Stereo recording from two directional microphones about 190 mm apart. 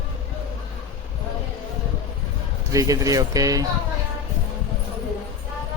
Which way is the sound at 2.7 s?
15° right (ahead or behind).